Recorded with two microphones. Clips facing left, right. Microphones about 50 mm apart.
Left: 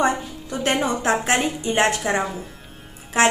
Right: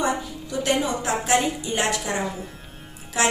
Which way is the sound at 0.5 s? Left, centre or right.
Left.